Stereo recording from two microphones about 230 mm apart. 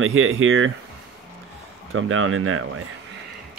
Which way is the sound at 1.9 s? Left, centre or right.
Right.